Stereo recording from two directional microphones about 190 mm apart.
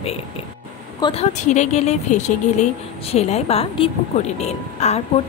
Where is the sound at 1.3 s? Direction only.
40° left (ahead or behind).